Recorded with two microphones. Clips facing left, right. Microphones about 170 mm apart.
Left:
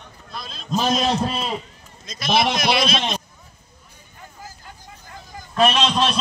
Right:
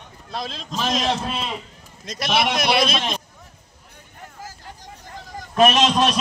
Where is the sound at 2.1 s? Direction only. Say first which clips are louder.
Right 6 dB; 80° right.